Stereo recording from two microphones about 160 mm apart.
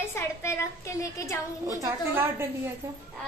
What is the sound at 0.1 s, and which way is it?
A woman's voice, 15° left (ahead or behind).